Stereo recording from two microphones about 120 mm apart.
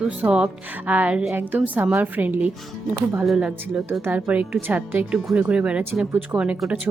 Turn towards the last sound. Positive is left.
turn(degrees=-10)  # may be behind; listen again after turning